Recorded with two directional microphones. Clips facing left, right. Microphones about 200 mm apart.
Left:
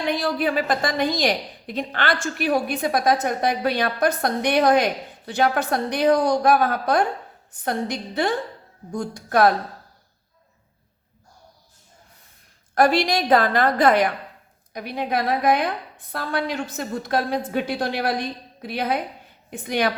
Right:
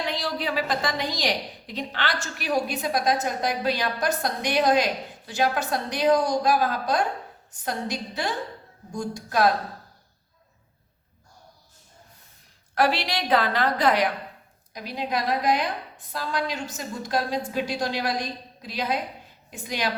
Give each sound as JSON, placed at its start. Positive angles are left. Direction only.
{"t": 0.1, "sound": "a woman's voice", "side_deg": 55}
{"t": 12.7, "sound": "a woman's voice", "side_deg": 45}